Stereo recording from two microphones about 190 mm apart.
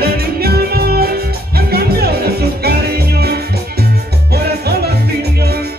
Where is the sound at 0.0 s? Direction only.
55° right (ahead or behind).